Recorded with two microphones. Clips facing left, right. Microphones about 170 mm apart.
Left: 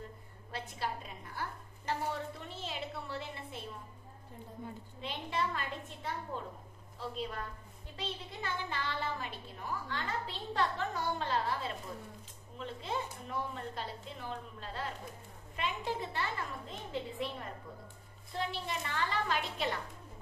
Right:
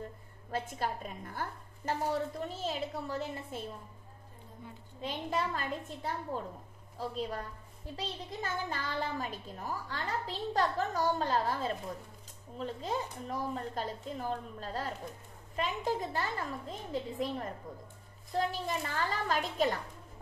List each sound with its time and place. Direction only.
0.5 s a woman's voice: 45° right (ahead or behind)
5.0 s a child's voice: 40° right (ahead or behind)